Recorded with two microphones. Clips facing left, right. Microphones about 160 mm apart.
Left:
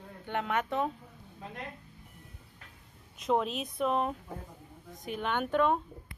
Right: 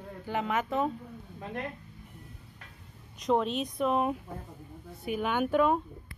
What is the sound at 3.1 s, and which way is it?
A woman's voice, centre (ahead or behind).